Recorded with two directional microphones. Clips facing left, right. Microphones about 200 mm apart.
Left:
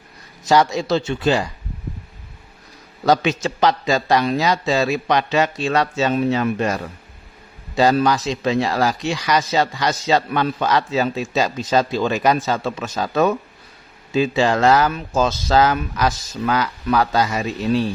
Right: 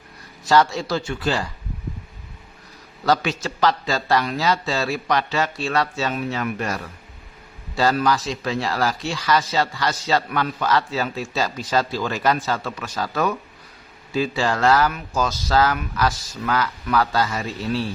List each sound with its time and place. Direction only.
0.4 s speech: 15° left (ahead or behind)
3.1 s speech: 20° left (ahead or behind)